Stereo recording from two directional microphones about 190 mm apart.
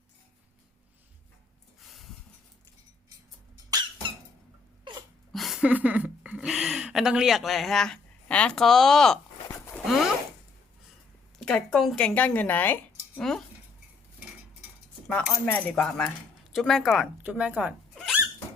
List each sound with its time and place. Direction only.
3.7 s squeak: 20° right (ahead or behind)
5.3 s speech: centre (ahead or behind)
9.5 s a sound: 15° left (ahead or behind)
11.3 s speech: 5° left (ahead or behind)
15.0 s speech: 5° left (ahead or behind)